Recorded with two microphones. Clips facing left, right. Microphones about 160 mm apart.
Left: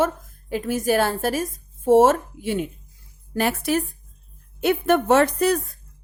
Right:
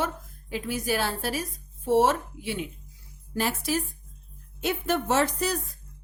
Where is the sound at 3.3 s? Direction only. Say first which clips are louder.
Left 6 dB; 60° left (ahead or behind).